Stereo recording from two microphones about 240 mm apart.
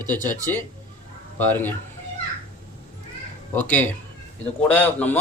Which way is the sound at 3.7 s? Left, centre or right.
Centre.